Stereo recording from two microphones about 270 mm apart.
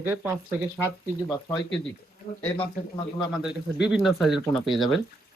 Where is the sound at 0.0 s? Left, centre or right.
Centre.